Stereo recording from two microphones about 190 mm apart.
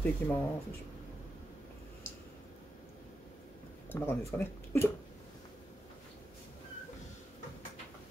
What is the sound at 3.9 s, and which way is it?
Speech, 10° left (ahead or behind).